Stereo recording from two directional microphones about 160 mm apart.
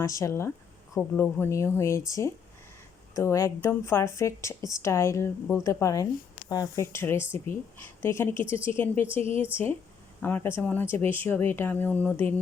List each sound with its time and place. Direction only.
0.0 s speech: 20° left (ahead or behind)